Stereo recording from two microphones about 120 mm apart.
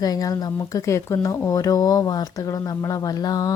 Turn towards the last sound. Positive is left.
turn(degrees=30)  # may be behind; listen again after turning